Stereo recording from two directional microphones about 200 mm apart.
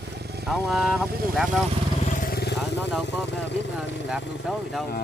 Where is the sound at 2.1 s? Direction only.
45° left (ahead or behind).